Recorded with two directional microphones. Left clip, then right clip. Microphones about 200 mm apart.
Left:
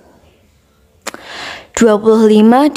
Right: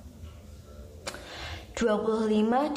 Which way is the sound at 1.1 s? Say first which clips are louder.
Left 14 dB; 60° left (ahead or behind).